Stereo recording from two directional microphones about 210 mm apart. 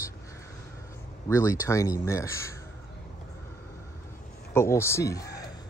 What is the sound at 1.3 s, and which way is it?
Speech, 15° left (ahead or behind).